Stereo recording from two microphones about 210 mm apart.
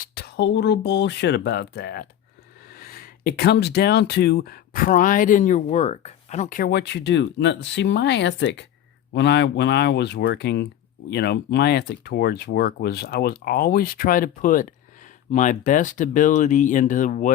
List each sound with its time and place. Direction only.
0.0 s speech: 50° left (ahead or behind)